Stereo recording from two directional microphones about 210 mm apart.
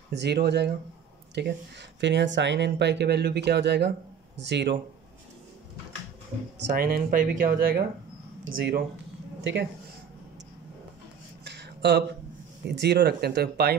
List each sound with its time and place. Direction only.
0.1 s speech: 55° right (ahead or behind)
6.7 s speech: 45° right (ahead or behind)
11.4 s a sound: 55° right (ahead or behind)
12.6 s speech: 55° right (ahead or behind)